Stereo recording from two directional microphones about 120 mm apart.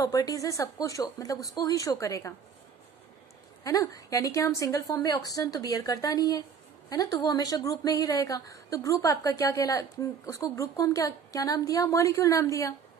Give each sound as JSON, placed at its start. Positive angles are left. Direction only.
{"t": 0.0, "sound": "speech", "side_deg": 30}
{"t": 3.6, "sound": "speech", "side_deg": 30}